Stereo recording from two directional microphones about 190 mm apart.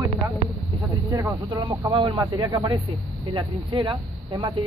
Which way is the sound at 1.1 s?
20° right (ahead or behind).